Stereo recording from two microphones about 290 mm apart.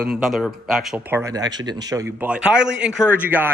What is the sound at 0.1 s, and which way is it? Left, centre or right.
Speech, centre.